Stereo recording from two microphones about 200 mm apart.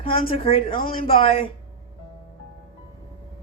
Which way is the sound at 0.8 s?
45° left (ahead or behind).